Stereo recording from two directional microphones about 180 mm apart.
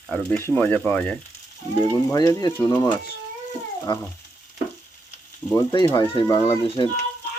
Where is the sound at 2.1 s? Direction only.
20° left (ahead or behind).